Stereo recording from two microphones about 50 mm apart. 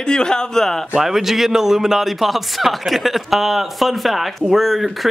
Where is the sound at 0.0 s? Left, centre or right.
Centre.